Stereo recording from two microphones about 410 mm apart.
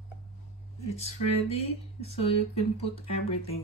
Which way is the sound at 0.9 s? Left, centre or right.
Centre.